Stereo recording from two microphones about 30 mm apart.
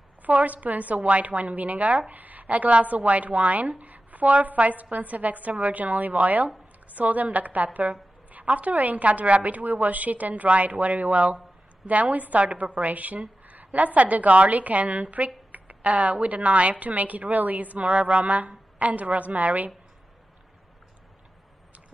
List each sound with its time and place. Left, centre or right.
0.5 s a woman's voice: right
2.0 s a woman's voice: right
6.1 s a woman's voice: right
11.9 s a woman's voice: right
12.9 s a woman's voice: right
16.8 s a woman's voice: right
17.8 s a sound: right
18.8 s a woman's voice: right